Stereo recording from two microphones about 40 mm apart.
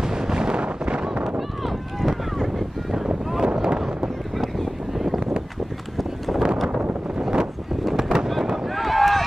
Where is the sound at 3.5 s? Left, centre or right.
Centre.